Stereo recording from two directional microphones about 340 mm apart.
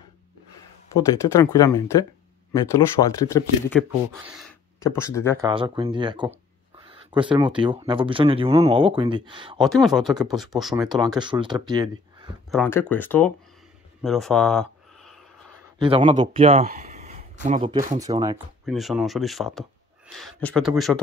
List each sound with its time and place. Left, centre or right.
0.9 s speech: centre
5.4 s speech: centre
9.6 s speech: centre
10.9 s speech: centre
12.4 s speech: centre
15.8 s speech: centre
18.7 s speech: centre